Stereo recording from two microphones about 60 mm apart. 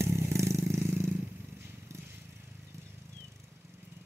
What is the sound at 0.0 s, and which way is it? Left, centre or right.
Vehicle, right.